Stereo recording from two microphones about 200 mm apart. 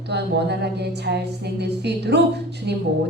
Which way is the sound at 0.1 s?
55° right (ahead or behind).